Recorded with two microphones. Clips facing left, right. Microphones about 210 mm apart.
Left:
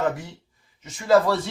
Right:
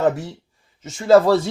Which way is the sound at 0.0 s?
30° right (ahead or behind).